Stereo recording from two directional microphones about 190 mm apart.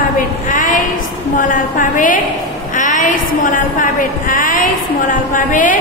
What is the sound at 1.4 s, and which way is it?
A woman's voice, 45° left (ahead or behind).